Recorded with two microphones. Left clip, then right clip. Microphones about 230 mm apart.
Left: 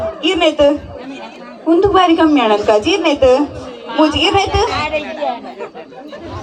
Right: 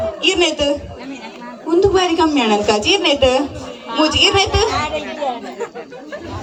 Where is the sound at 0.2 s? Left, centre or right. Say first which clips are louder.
Left 4 dB; right.